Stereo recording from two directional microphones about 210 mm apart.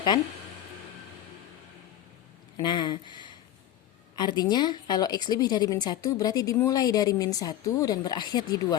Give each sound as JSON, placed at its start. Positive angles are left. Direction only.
{"t": 2.6, "sound": "a woman's voice", "side_deg": 20}